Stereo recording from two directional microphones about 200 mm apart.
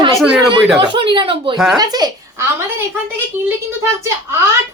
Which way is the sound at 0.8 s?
25° right (ahead or behind).